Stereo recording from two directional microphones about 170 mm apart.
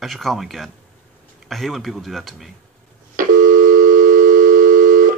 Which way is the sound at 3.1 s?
50° right (ahead or behind).